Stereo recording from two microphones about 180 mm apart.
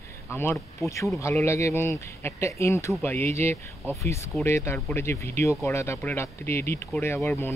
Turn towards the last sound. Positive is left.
turn(degrees=15)  # may be behind; listen again after turning